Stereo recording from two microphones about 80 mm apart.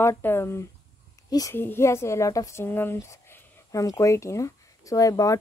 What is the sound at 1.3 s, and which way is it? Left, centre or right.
Speech, left.